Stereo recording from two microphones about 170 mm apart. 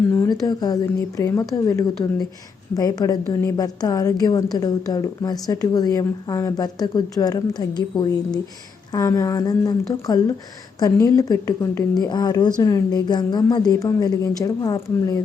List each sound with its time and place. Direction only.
0.2 s a woman's voice: 20° left (ahead or behind)